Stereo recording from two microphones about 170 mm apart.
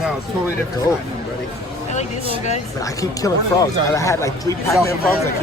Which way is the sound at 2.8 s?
20° left (ahead or behind).